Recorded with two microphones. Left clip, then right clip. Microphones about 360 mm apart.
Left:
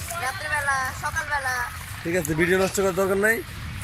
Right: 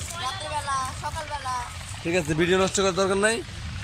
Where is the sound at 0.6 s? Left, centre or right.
Centre.